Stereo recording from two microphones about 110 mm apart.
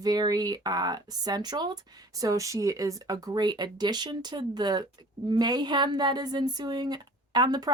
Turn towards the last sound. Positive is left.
turn(degrees=-40)  # may be behind; listen again after turning